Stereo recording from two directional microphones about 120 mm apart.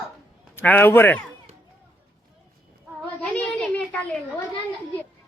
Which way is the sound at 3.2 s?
5° left (ahead or behind).